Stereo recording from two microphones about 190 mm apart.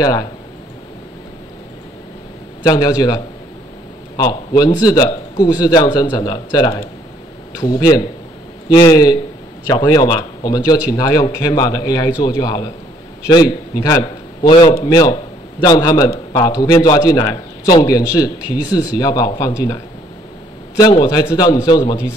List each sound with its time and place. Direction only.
0.0 s a man's voice: 20° left (ahead or behind)
2.6 s a man's voice: 20° left (ahead or behind)
4.2 s a man's voice: 20° left (ahead or behind)
14.9 s a man's voice: 20° left (ahead or behind)